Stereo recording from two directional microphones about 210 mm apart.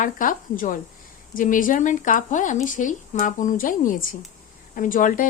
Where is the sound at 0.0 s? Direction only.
40° left (ahead or behind).